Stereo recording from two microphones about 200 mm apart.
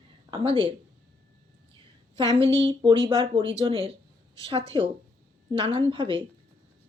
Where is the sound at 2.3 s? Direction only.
25° right (ahead or behind).